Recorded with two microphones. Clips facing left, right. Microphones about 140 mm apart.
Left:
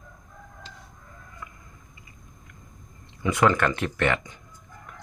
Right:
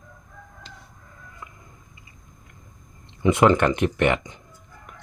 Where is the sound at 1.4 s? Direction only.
25° right (ahead or behind).